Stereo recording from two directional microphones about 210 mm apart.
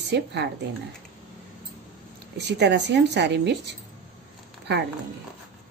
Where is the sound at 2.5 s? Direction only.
55° right (ahead or behind).